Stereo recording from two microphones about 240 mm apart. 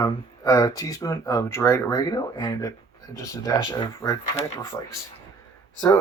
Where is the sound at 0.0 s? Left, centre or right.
Centre.